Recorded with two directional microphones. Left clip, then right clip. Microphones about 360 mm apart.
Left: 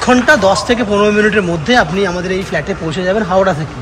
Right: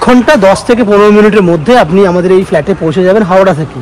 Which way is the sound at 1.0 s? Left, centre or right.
Centre.